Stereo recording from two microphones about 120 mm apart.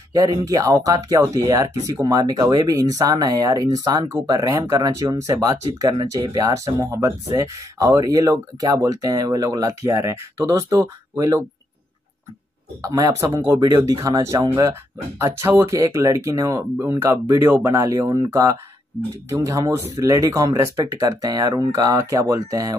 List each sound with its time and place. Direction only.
0.5 s speech: 30° right (ahead or behind)
12.8 s speech: 30° right (ahead or behind)